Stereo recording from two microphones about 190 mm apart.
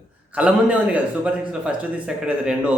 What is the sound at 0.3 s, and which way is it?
A man's voice, 5° right (ahead or behind).